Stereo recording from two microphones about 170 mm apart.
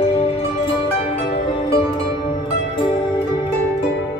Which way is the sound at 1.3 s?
30° left (ahead or behind).